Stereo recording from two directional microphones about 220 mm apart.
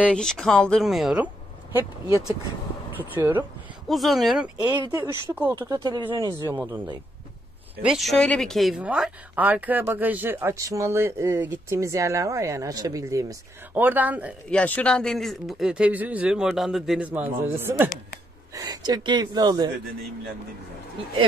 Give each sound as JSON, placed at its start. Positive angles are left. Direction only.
{"t": 0.0, "sound": "speech", "side_deg": 5}
{"t": 3.0, "sound": "speech", "side_deg": -10}
{"t": 4.6, "sound": "speech", "side_deg": -15}
{"t": 7.8, "sound": "speech", "side_deg": 0}
{"t": 14.5, "sound": "speech", "side_deg": 5}